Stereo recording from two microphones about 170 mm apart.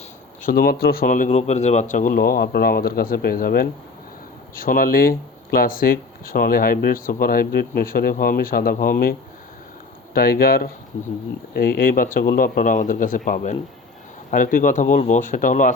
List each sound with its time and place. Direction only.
0.4 s speech: 60° left (ahead or behind)
10.2 s speech: 60° left (ahead or behind)